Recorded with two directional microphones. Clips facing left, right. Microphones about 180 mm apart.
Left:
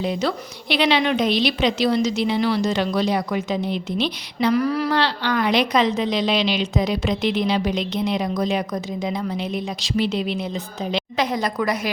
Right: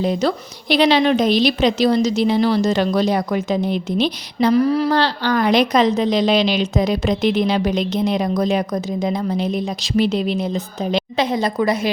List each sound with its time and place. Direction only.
0.0 s a woman's voice: 40° right (ahead or behind)
4.5 s a woman's voice: 30° right (ahead or behind)
4.9 s a woman's voice: 40° right (ahead or behind)
11.2 s a woman's voice: 25° right (ahead or behind)